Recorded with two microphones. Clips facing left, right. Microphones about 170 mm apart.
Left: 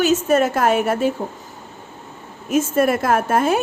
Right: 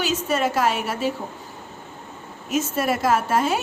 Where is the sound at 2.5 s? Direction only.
50° left (ahead or behind).